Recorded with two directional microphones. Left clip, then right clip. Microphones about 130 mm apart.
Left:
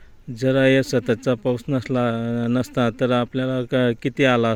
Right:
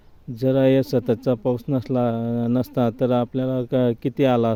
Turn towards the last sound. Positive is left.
turn(degrees=-15)  # may be behind; listen again after turning